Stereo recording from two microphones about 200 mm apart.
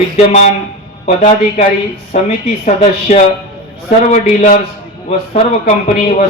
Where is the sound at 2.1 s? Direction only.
35° left (ahead or behind).